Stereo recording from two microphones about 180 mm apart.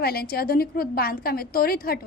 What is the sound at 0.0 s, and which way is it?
A woman's voice, 60° left (ahead or behind).